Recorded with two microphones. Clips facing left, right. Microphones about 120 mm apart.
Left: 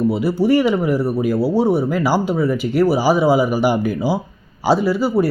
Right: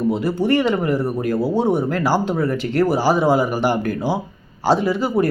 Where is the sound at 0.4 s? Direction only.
10° left (ahead or behind).